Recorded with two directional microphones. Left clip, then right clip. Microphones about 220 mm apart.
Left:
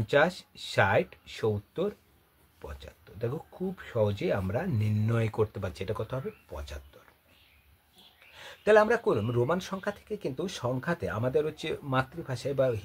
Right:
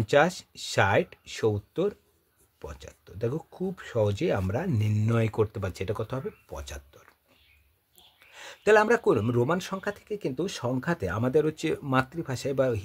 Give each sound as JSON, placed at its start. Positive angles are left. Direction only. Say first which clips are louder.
{"t": 0.0, "sound": "speech", "louder": "right 2 dB", "side_deg": -35}
{"t": 8.4, "sound": "speech", "louder": "right 1 dB", "side_deg": -45}